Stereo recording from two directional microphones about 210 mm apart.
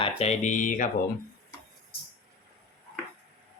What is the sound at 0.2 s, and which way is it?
Speech, 35° left (ahead or behind).